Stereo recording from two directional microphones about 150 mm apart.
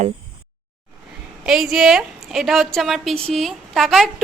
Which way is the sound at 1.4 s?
5° right (ahead or behind).